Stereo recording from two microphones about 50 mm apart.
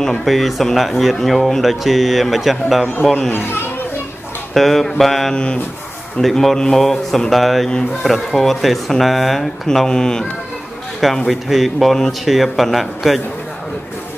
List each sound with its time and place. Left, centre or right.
0.0 s speech: centre
3.3 s speech: left
4.6 s speech: centre
5.3 s speech: centre
6.2 s speech: centre
9.7 s speech: centre
11.2 s speech: centre